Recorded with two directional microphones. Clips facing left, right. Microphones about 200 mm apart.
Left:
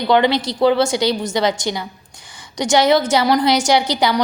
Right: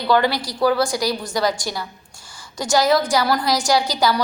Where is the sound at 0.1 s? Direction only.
20° left (ahead or behind).